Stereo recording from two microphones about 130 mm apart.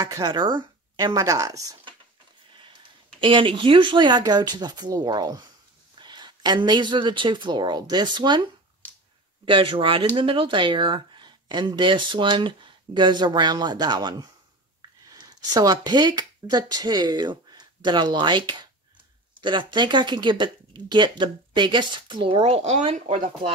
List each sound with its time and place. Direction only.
0.0 s speech: 30° right (ahead or behind)
3.2 s a woman's voice: 40° right (ahead or behind)